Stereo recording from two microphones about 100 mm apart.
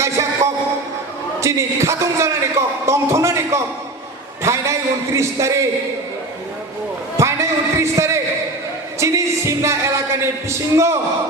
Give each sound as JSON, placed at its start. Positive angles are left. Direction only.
{"t": 0.0, "sound": "a sound", "side_deg": -30}
{"t": 1.4, "sound": "a man's voice", "side_deg": -30}
{"t": 7.2, "sound": "a man's voice", "side_deg": -30}